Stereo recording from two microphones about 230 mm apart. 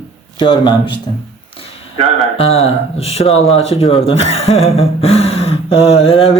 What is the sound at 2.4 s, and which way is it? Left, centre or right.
Speech, left.